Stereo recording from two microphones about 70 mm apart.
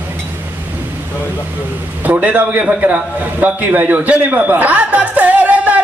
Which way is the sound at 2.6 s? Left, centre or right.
Centre.